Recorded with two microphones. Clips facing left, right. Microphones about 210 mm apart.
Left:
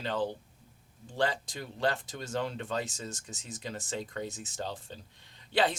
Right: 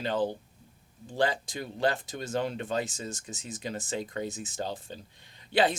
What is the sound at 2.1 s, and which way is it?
Speech, 15° right (ahead or behind).